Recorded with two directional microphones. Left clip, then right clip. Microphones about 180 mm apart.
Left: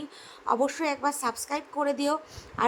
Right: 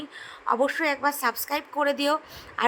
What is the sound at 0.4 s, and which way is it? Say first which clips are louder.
A woman's voice: right 3 dB; 10° right (ahead or behind).